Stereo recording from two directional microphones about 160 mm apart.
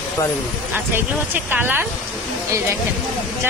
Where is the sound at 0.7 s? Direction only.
10° right (ahead or behind).